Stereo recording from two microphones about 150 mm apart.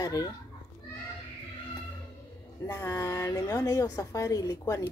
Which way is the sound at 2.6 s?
20° left (ahead or behind).